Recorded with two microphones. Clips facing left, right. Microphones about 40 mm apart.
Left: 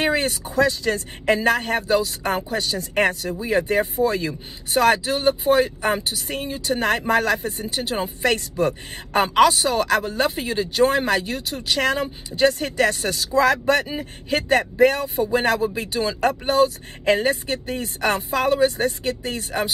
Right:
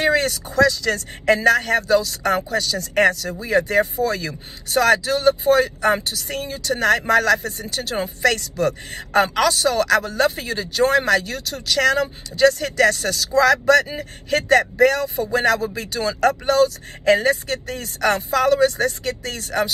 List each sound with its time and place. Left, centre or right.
0.0 s speech: left
7.8 s speech: centre
8.2 s speech: left